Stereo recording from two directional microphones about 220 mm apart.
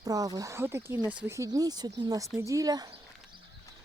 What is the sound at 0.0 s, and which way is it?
Speech, 15° right (ahead or behind).